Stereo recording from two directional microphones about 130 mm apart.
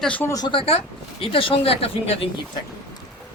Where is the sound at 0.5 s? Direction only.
50° left (ahead or behind).